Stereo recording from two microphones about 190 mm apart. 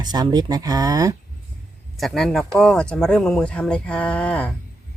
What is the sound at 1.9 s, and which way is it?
Speech, centre (ahead or behind).